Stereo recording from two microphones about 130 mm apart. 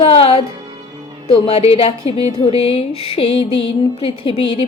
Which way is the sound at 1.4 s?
55° left (ahead or behind).